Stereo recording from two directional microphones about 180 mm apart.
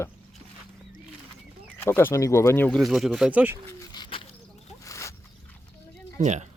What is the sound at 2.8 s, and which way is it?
Speech, centre (ahead or behind).